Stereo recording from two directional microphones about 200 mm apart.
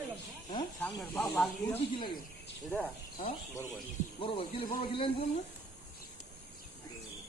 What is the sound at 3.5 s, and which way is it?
Speech, 15° left (ahead or behind).